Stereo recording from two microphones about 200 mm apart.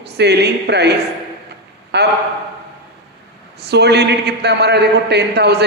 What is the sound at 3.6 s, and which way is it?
A man's voice, 55° right (ahead or behind).